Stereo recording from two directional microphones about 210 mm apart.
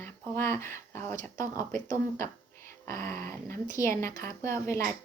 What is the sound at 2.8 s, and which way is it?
A woman's voice, 10° left (ahead or behind).